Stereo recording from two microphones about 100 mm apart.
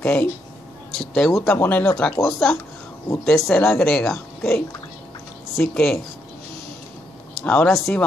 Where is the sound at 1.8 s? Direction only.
5° left (ahead or behind).